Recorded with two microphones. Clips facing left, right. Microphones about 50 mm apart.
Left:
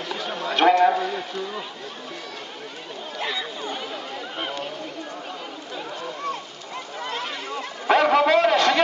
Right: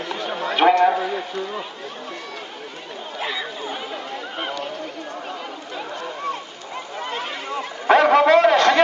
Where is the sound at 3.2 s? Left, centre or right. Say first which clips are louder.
Right 1 dB; centre.